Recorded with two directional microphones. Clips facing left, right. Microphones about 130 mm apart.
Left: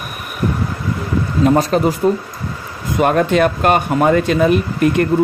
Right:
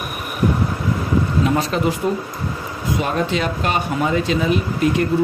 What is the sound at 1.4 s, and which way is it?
Speech, 45° left (ahead or behind).